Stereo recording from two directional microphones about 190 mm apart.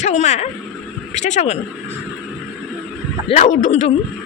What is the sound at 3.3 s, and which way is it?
Speech, 40° left (ahead or behind).